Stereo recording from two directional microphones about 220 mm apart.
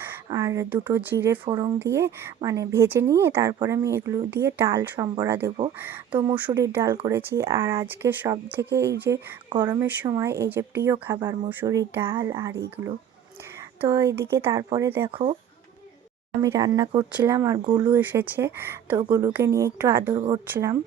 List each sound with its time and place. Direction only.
0.0 s speech: 10° right (ahead or behind)
1.5 s speech: 20° right (ahead or behind)
15.1 s speech: 25° right (ahead or behind)
16.4 s speech: 15° right (ahead or behind)
20.1 s speech: 20° right (ahead or behind)
20.5 s speech: 10° right (ahead or behind)